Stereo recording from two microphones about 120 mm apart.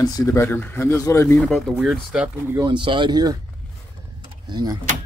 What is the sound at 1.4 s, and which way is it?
Speech, 5° left (ahead or behind).